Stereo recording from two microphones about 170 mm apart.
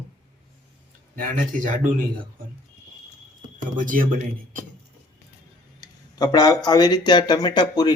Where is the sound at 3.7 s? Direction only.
50° right (ahead or behind).